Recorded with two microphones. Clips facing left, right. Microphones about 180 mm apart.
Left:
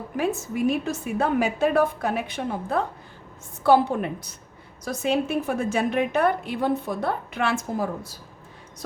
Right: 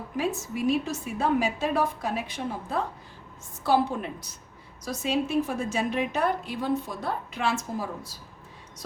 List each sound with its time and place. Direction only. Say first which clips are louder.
0.2 s a woman's voice: left 4 dB; 55° left (ahead or behind)